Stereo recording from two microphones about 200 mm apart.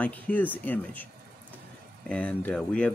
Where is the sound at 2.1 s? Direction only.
5° left (ahead or behind).